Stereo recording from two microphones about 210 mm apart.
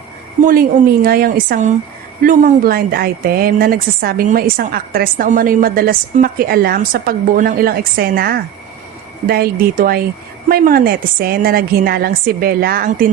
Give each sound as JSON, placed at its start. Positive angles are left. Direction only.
{"t": 1.0, "sound": "a woman's voice", "side_deg": -45}